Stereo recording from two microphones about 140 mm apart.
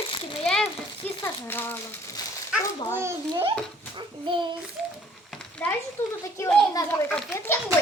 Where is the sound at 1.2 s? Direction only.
15° left (ahead or behind).